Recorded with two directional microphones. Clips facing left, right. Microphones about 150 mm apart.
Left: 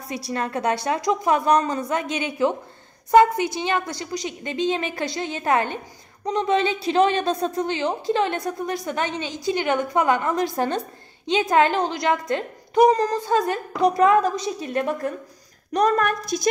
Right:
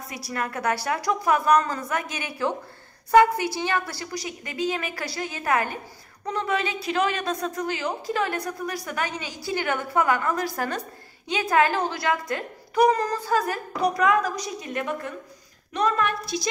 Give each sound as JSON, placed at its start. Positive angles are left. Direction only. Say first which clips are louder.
{"t": 0.1, "sound": "a woman's voice", "louder": "left 5 dB", "side_deg": 25}